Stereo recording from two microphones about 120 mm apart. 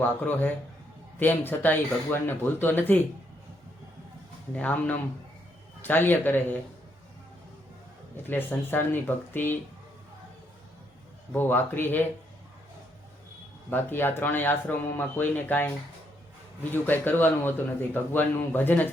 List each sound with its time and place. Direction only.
0.0 s a man's voice: 15° left (ahead or behind)
4.5 s a man's voice: 15° left (ahead or behind)
8.1 s a man's voice: 15° left (ahead or behind)
11.3 s a man's voice: 15° left (ahead or behind)
13.7 s a man's voice: 15° left (ahead or behind)
16.7 s a man's voice: 15° left (ahead or behind)